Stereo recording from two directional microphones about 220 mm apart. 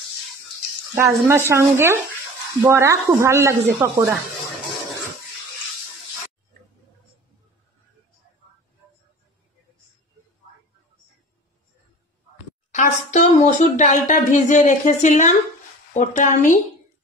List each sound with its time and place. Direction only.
0.9 s speech: 10° right (ahead or behind)
12.7 s speech: 30° left (ahead or behind)